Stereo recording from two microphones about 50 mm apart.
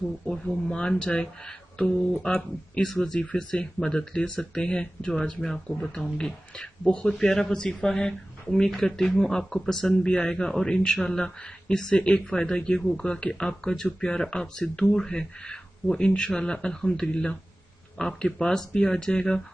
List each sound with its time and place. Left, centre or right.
0.3 s speech: centre
2.7 s speech: centre